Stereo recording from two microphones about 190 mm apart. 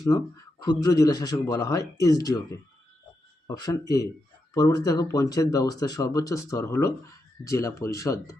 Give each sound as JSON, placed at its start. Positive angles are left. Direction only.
{"t": 0.6, "sound": "speech", "side_deg": 20}